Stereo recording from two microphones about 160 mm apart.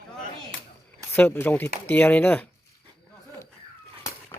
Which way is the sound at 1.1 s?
10° left (ahead or behind).